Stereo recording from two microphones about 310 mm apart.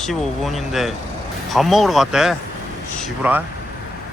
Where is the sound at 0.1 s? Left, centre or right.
Centre.